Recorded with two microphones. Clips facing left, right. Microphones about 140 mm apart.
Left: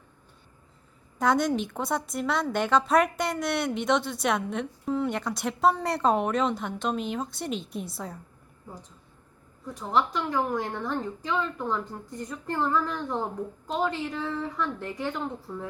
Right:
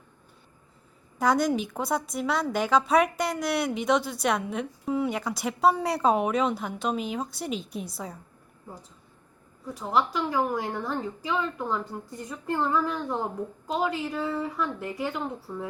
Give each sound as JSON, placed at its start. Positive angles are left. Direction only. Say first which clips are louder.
{"t": 1.2, "sound": "a woman's voice", "louder": "even", "side_deg": 0}
{"t": 9.6, "sound": "a woman's voice", "louder": "even", "side_deg": -5}